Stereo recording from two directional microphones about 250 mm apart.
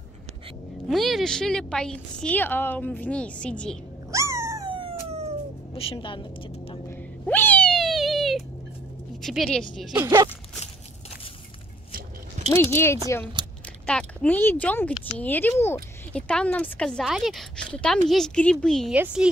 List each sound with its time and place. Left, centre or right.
0.8 s a woman's voice: centre
4.1 s dog: centre
5.8 s a woman's voice: left
7.2 s cat: centre
9.2 s a woman's voice: centre
10.0 s speech: centre
12.4 s a woman's voice: centre